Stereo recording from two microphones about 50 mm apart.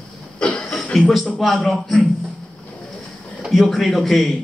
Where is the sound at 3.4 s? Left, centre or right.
Centre.